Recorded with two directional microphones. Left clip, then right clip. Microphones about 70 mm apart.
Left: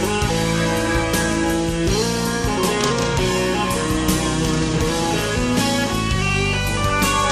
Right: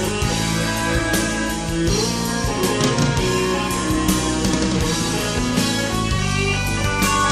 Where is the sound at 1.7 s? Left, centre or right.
Centre.